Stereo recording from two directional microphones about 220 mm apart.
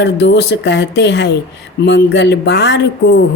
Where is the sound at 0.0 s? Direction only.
50° left (ahead or behind).